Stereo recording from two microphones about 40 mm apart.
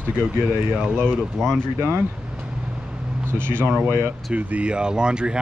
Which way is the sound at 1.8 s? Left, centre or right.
Right.